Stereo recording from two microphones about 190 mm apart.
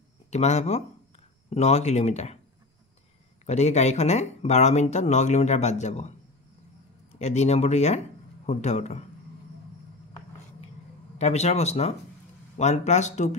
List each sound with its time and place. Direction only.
0.3 s speech: 35° left (ahead or behind)
3.4 s speech: 35° left (ahead or behind)
7.2 s speech: 35° left (ahead or behind)
11.1 s speech: 35° left (ahead or behind)